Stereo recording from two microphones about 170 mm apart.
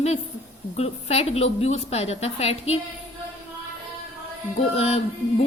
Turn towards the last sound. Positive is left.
turn(degrees=35)  # may be behind; listen again after turning